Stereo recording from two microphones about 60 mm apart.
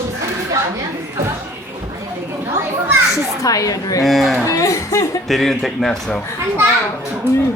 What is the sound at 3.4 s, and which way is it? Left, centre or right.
Speech, left.